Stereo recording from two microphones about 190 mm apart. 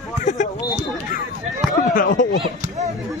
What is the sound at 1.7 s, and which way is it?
Speech, 45° left (ahead or behind).